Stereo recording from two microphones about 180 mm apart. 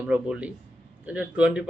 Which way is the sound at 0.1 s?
5° right (ahead or behind).